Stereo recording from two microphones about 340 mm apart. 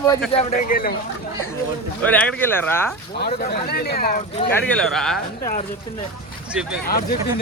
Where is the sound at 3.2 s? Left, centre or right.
Left.